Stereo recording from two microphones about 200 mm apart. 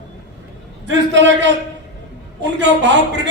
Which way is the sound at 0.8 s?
65° right (ahead or behind).